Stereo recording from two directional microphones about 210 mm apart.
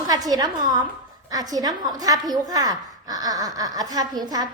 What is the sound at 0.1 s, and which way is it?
A woman's voice, 15° right (ahead or behind).